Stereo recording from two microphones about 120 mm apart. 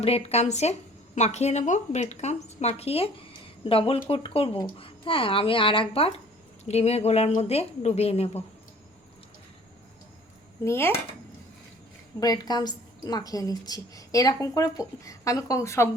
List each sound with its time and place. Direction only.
0.0 s speech: 60° left (ahead or behind)
6.7 s speech: 60° left (ahead or behind)
10.6 s a child's voice: 20° left (ahead or behind)
12.2 s a woman's voice: 35° left (ahead or behind)